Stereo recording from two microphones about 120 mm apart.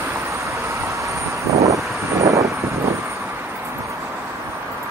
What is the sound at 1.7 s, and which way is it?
Vehicle, 25° right (ahead or behind).